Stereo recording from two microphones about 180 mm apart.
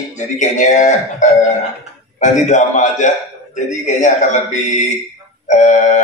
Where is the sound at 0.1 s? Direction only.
40° left (ahead or behind).